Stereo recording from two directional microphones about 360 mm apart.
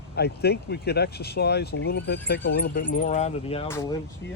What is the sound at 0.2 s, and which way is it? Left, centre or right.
Speech, left.